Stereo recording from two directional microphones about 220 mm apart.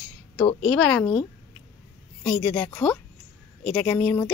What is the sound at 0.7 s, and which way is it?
Speech, 5° left (ahead or behind).